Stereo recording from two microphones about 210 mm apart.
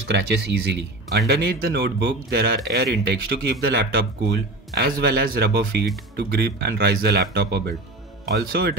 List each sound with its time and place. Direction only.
0.1 s speech: 55° right (ahead or behind)